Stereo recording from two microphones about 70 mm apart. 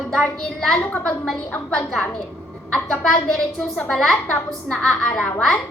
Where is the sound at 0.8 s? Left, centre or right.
Left.